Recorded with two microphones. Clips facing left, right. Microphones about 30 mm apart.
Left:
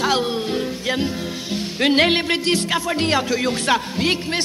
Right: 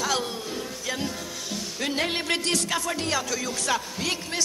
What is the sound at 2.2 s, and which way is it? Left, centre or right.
Music, left.